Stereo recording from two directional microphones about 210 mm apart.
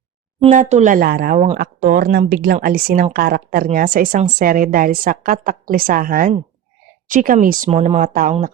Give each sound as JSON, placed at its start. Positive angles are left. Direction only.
{"t": 0.3, "sound": "a woman's voice", "side_deg": -30}